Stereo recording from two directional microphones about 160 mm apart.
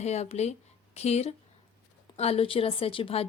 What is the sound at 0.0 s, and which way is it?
A woman's voice, 45° left (ahead or behind).